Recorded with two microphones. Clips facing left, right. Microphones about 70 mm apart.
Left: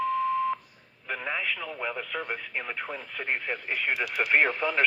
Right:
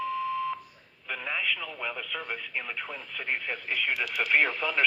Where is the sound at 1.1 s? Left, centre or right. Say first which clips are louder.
Left 2 dB; left.